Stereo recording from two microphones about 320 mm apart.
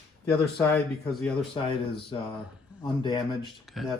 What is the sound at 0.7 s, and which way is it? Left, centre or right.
Speech, centre.